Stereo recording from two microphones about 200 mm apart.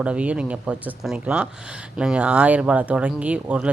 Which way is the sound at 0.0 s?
5° right (ahead or behind).